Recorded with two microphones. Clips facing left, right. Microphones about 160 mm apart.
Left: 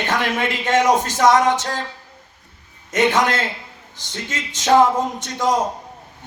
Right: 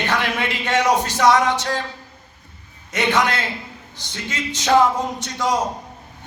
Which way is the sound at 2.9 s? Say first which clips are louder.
Left 2 dB; 45° left (ahead or behind).